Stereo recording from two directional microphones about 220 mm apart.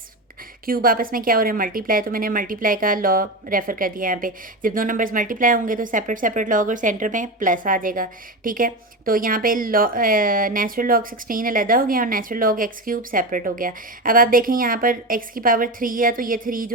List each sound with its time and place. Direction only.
0.6 s a woman's voice: 40° right (ahead or behind)